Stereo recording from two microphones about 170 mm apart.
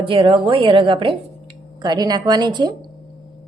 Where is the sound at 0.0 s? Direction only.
30° right (ahead or behind).